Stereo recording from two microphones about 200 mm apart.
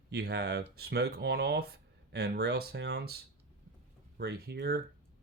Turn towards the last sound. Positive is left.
turn(degrees=-50)  # may be behind; listen again after turning